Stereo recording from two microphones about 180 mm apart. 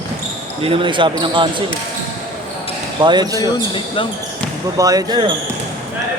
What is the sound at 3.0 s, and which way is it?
Speech, 25° right (ahead or behind).